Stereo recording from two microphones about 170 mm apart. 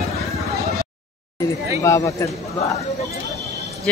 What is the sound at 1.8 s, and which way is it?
Speech, 20° left (ahead or behind).